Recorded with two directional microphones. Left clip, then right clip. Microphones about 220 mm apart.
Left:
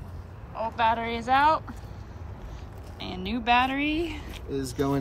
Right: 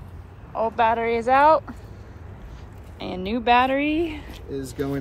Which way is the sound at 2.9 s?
5° left (ahead or behind).